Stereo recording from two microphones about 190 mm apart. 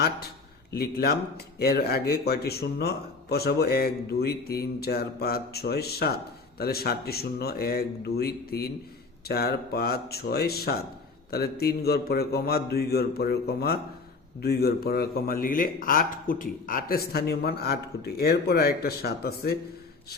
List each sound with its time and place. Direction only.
0.8 s speech: 55° left (ahead or behind)